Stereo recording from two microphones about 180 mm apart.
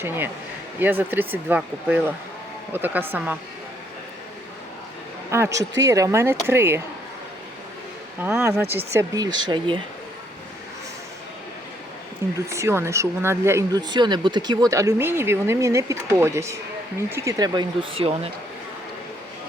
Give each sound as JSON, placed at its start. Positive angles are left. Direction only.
{"t": 0.8, "sound": "speech", "side_deg": -10}
{"t": 5.3, "sound": "speech", "side_deg": -15}
{"t": 8.2, "sound": "speech", "side_deg": -15}
{"t": 12.5, "sound": "speech", "side_deg": -15}